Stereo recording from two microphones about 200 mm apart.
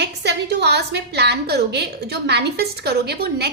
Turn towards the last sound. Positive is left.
turn(degrees=-55)  # may be behind; listen again after turning